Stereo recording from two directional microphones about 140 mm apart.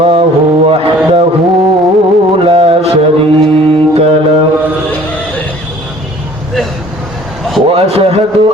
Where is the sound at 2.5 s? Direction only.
45° right (ahead or behind).